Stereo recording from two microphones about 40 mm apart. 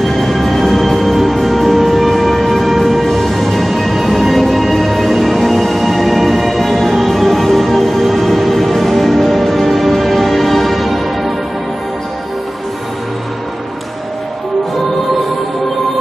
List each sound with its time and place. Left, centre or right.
0.0 s music: centre